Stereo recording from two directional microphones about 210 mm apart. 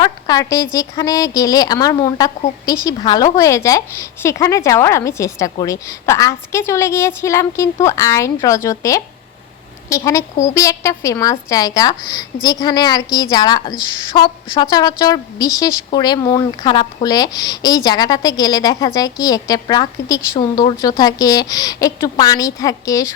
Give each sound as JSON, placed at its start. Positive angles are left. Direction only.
{"t": 0.0, "sound": "speech", "side_deg": 20}